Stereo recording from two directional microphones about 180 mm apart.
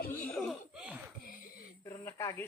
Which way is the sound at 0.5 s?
5° right (ahead or behind).